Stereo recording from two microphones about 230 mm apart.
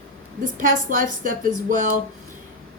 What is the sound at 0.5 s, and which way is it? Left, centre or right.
Speech, right.